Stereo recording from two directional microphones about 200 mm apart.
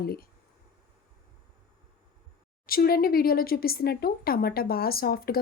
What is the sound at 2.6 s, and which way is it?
Speech, 50° left (ahead or behind).